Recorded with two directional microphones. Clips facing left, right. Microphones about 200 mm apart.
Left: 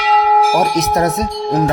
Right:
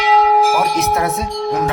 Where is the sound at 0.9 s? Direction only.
40° left (ahead or behind).